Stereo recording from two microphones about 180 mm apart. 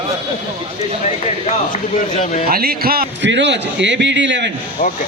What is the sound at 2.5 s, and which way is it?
A man's voice, 55° right (ahead or behind).